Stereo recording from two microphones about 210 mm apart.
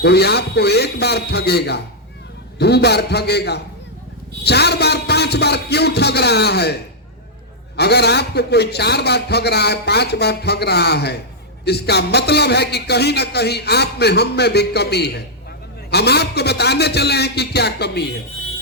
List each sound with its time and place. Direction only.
0.0 s a man's voice: 50° left (ahead or behind)
7.8 s a man's voice: 50° left (ahead or behind)